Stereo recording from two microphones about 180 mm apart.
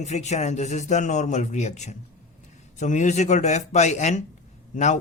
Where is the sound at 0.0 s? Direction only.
40° left (ahead or behind).